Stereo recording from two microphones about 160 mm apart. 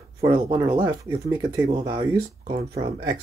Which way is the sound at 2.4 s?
50° right (ahead or behind).